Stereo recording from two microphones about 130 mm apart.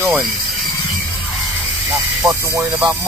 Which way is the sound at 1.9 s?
20° right (ahead or behind).